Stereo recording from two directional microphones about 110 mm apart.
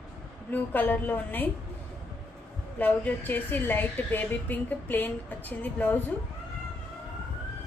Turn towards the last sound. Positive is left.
turn(degrees=15)  # may be behind; listen again after turning